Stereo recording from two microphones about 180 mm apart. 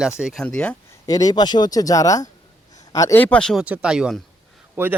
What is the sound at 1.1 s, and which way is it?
Speech, 20° left (ahead or behind).